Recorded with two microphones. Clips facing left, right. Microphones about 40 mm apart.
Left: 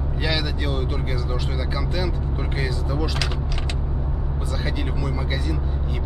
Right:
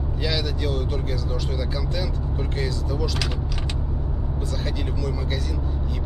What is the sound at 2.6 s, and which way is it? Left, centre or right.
Speech, centre.